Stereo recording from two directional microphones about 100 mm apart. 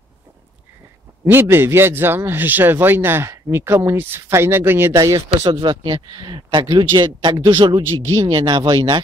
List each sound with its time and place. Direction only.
1.2 s a man's voice: 25° right (ahead or behind)
4.9 s speech: 35° right (ahead or behind)
5.5 s speech: 50° right (ahead or behind)
8.0 s speech: 30° right (ahead or behind)
8.3 s speech: 40° right (ahead or behind)